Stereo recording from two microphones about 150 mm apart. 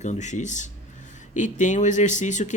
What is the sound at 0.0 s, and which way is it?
Speech, 50° left (ahead or behind).